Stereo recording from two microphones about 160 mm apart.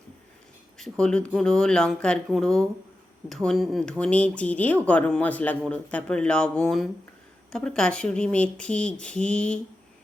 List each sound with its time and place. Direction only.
0.8 s speech: 5° left (ahead or behind)